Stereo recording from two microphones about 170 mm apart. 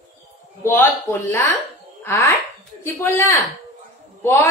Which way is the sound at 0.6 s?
15° left (ahead or behind).